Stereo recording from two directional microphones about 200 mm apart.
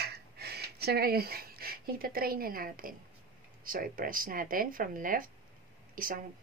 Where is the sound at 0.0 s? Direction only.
55° right (ahead or behind).